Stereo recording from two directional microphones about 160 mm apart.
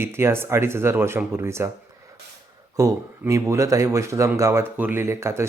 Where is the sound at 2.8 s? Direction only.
20° right (ahead or behind).